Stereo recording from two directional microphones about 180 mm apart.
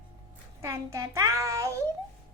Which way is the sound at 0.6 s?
15° right (ahead or behind).